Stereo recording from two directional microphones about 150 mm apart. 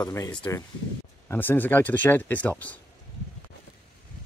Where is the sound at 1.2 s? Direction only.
15° left (ahead or behind).